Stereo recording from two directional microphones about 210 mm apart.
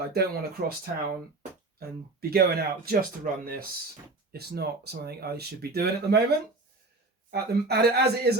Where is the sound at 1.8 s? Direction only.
50° right (ahead or behind).